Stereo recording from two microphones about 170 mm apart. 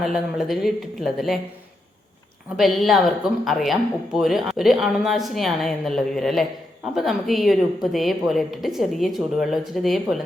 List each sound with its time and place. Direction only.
0.0 s speech: centre (ahead or behind)
2.6 s speech: centre (ahead or behind)